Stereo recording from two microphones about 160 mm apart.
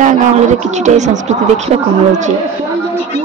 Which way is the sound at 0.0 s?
50° right (ahead or behind).